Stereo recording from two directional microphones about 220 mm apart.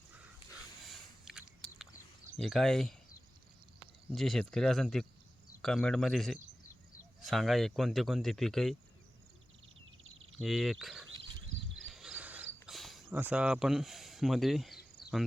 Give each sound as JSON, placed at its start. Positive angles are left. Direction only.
{"t": 0.8, "sound": "a sound", "side_deg": 0}
{"t": 2.3, "sound": "speech", "side_deg": 0}
{"t": 4.1, "sound": "speech", "side_deg": 0}
{"t": 10.3, "sound": "speech", "side_deg": 0}
{"t": 11.9, "sound": "cricket", "side_deg": -5}
{"t": 12.6, "sound": "speech", "side_deg": 0}